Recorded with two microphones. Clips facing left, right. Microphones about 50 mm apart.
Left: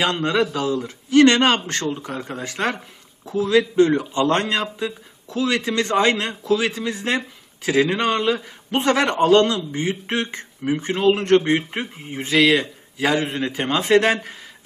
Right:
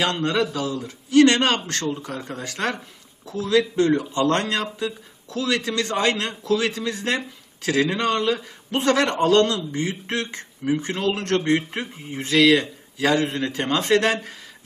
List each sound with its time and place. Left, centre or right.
0.0 s a man's voice: left
0.9 s a man's voice: left; by 14.1 s centre
14.1 s a man's voice: left